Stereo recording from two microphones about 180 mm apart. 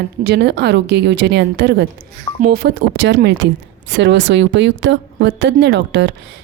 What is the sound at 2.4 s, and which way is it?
A woman's voice, 60° right (ahead or behind).